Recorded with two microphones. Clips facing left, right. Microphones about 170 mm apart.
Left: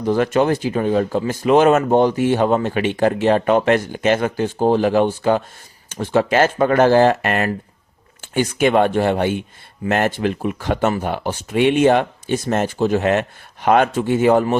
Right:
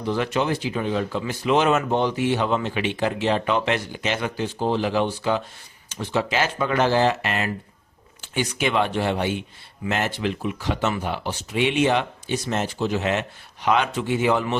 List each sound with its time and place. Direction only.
0.0 s speech: 45° left (ahead or behind)